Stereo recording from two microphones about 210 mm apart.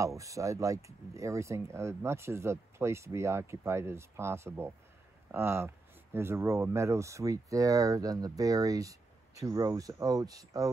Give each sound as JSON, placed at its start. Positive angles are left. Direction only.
{"t": 0.0, "sound": "speech", "side_deg": -15}